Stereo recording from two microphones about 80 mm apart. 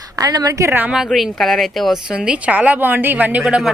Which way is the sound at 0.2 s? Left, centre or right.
Right.